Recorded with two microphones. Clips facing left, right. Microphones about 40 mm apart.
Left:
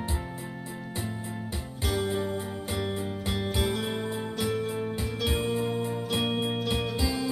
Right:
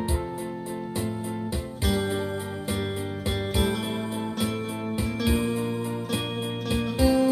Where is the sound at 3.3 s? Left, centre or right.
Right.